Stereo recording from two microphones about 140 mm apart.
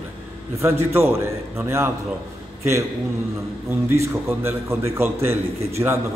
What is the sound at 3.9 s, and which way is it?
A man's voice, 20° right (ahead or behind).